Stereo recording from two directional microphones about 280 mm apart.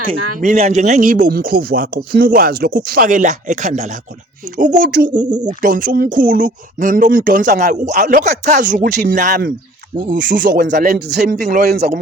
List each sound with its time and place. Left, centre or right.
0.3 s speech: right